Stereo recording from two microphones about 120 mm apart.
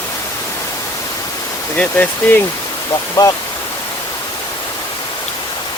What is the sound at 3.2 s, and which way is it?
Speech, 25° left (ahead or behind).